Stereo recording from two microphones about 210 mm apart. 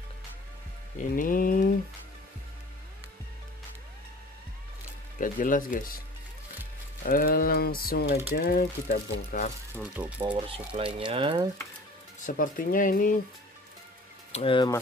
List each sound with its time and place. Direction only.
0.9 s a sound: 40° left (ahead or behind)
5.2 s speech: 40° left (ahead or behind)
7.0 s speech: 40° left (ahead or behind)
9.9 s speech: 5° right (ahead or behind)
10.3 s speech: 25° right (ahead or behind)
12.2 s speech: 40° left (ahead or behind)
14.3 s speech: 25° left (ahead or behind)